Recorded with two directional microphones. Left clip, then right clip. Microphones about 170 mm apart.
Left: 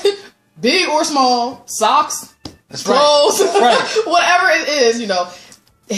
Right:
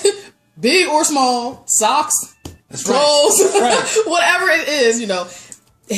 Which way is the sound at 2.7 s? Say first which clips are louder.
Left 3 dB; 5° left (ahead or behind).